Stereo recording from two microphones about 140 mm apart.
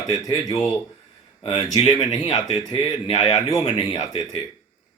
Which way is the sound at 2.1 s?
55° left (ahead or behind).